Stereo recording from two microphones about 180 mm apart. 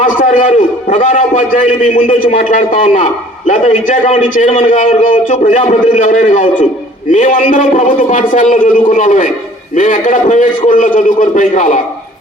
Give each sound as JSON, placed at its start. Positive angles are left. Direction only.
{"t": 0.0, "sound": "a man's voice", "side_deg": 45}